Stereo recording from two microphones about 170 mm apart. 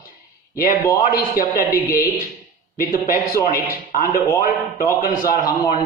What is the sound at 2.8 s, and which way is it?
A man's voice, 55° left (ahead or behind).